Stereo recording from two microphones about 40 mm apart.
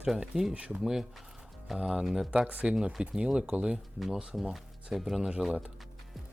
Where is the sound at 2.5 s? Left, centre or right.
Right.